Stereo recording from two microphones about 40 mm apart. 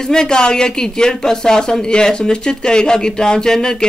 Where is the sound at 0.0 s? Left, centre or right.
Centre.